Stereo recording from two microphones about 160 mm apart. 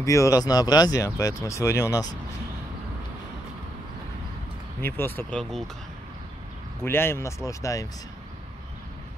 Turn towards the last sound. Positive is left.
turn(degrees=20)  # may be behind; listen again after turning